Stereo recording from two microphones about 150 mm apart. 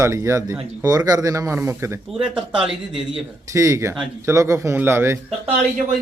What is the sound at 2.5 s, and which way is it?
Speech, 35° right (ahead or behind).